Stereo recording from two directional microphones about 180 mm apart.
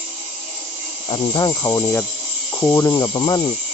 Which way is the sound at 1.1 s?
20° left (ahead or behind).